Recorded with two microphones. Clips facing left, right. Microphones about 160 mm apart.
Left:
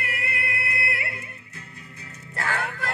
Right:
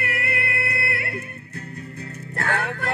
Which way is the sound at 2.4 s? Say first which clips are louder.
Right 3 dB; 55° right (ahead or behind).